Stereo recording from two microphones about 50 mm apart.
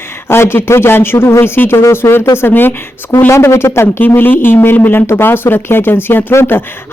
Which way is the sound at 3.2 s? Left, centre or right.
Left.